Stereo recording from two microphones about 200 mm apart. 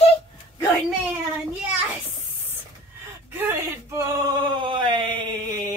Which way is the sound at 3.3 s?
15° right (ahead or behind).